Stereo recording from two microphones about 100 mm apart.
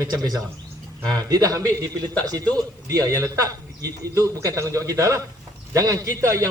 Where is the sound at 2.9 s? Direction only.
30° right (ahead or behind).